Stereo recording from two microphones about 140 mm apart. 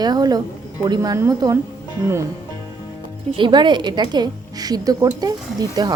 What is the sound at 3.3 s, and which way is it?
A woman's voice, 35° right (ahead or behind).